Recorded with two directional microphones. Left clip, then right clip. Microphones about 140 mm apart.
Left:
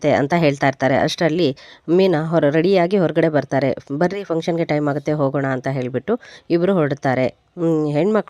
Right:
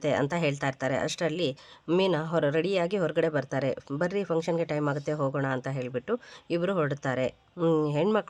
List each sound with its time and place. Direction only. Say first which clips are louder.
0.0 s speech: left 11 dB; 45° left (ahead or behind)
7.6 s speech: left 6 dB; 25° left (ahead or behind)